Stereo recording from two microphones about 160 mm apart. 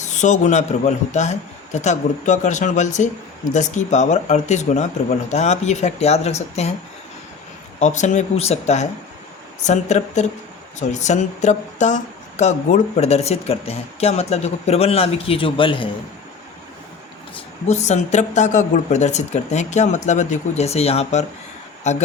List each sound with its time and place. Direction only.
0.0 s speech: 50° left (ahead or behind)
7.8 s speech: 45° left (ahead or behind)
17.7 s speech: 45° left (ahead or behind)